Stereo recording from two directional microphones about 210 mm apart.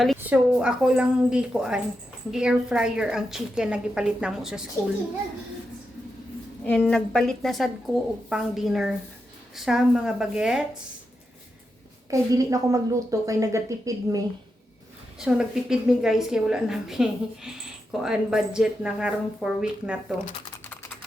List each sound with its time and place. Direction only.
0.0 s a woman's voice: 5° right (ahead or behind)
6.7 s a woman's voice: 5° left (ahead or behind)
12.1 s a woman's voice: 15° right (ahead or behind)
15.2 s a woman's voice: 5° right (ahead or behind)